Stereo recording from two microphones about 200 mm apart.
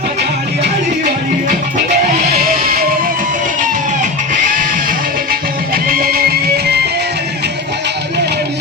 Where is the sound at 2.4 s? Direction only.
45° right (ahead or behind).